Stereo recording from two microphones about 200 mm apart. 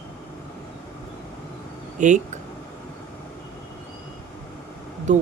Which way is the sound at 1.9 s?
35° right (ahead or behind).